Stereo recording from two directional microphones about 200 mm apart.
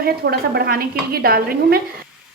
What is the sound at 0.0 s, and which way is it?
Speech, 50° right (ahead or behind).